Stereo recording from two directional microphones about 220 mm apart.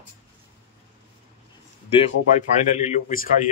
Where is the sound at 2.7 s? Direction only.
35° left (ahead or behind).